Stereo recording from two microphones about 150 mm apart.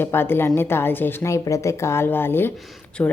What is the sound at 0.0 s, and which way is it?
A woman's voice, 15° left (ahead or behind).